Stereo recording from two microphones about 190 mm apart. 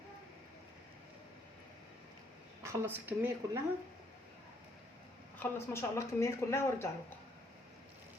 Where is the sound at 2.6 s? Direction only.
15° right (ahead or behind).